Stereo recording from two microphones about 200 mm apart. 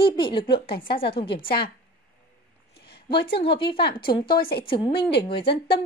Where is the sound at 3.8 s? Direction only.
50° left (ahead or behind).